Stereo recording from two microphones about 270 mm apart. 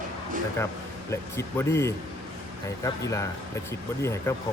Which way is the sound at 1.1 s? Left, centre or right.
Centre.